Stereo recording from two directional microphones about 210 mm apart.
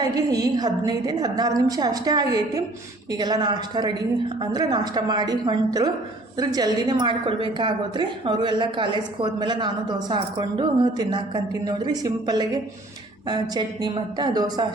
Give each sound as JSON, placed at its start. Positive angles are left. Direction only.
{"t": 0.0, "sound": "a woman's voice", "side_deg": -20}